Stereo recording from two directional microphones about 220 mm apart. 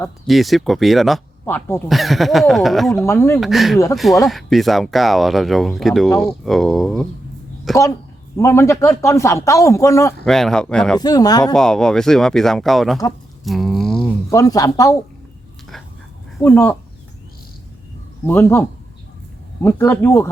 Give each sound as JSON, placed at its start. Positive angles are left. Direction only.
{"t": 0.3, "sound": "speech", "side_deg": 0}
{"t": 2.9, "sound": "speech", "side_deg": 10}
{"t": 3.4, "sound": "speech", "side_deg": 0}
{"t": 8.4, "sound": "speech", "side_deg": 15}
{"t": 10.2, "sound": "speech", "side_deg": 0}
{"t": 11.0, "sound": "speech", "side_deg": 15}
{"t": 11.5, "sound": "speech", "side_deg": 5}
{"t": 13.4, "sound": "a sound", "side_deg": 0}
{"t": 14.3, "sound": "speech", "side_deg": 15}
{"t": 16.4, "sound": "speech", "side_deg": 10}
{"t": 18.3, "sound": "speech", "side_deg": 10}
{"t": 19.6, "sound": "speech", "side_deg": 10}